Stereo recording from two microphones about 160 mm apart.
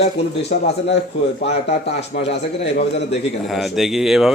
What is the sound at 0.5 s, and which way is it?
Speech, 55° left (ahead or behind).